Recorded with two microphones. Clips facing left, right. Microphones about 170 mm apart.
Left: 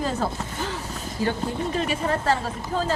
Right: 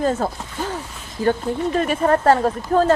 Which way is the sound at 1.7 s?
50° right (ahead or behind).